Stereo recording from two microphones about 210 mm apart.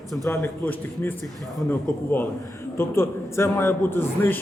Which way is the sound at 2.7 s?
10° left (ahead or behind).